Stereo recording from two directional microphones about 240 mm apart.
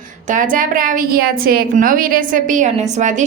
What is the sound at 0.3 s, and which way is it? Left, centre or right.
A woman's voice, right.